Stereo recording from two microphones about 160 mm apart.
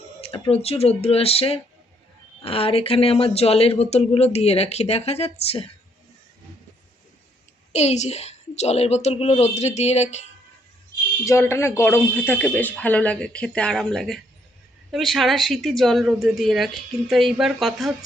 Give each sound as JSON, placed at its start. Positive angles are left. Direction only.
{"t": 0.2, "sound": "speech", "side_deg": 35}
{"t": 7.7, "sound": "a woman's voice", "side_deg": 45}
{"t": 11.3, "sound": "speech", "side_deg": 15}